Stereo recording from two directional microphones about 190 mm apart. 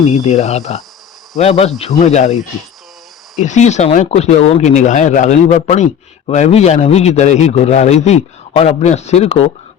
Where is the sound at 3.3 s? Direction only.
40° left (ahead or behind).